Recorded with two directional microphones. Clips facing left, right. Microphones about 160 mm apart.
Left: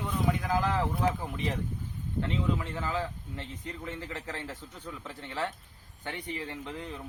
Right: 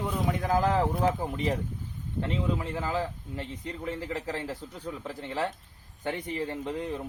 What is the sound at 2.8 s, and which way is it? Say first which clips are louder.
Speech: right 2 dB; 35° right (ahead or behind).